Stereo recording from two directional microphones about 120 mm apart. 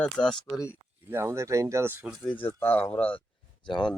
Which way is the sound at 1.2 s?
25° right (ahead or behind).